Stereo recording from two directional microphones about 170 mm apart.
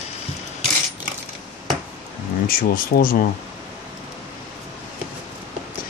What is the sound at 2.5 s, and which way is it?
Speech, 55° left (ahead or behind).